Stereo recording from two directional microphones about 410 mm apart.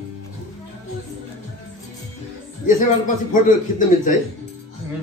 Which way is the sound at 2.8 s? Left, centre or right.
Centre.